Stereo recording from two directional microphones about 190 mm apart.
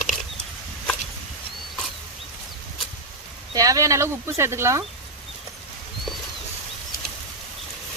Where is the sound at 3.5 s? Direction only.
15° right (ahead or behind).